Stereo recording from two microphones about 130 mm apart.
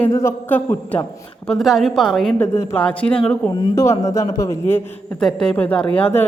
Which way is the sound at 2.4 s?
15° left (ahead or behind).